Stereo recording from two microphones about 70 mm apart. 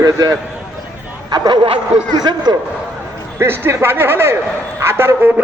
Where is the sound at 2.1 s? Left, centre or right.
Right.